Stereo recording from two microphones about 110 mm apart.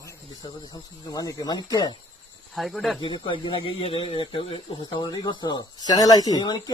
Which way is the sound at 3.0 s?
45° left (ahead or behind).